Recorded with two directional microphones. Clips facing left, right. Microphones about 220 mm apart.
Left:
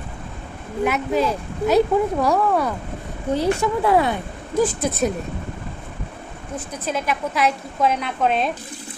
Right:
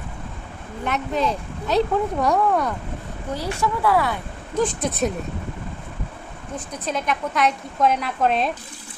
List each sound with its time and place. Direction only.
0.8 s speech: 5° left (ahead or behind)
3.3 s speech: 20° left (ahead or behind)
4.6 s speech: 5° left (ahead or behind)
6.8 s speech: 5° left (ahead or behind)